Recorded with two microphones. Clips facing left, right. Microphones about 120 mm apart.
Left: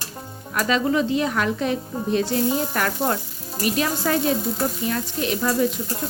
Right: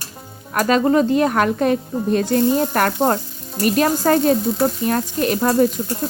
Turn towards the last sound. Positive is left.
turn(degrees=-50)  # may be behind; listen again after turning